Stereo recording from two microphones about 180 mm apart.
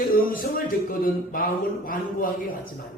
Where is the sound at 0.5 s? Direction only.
50° left (ahead or behind).